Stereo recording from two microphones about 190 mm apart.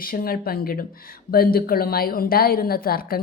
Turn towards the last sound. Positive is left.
turn(degrees=50)  # may be behind; listen again after turning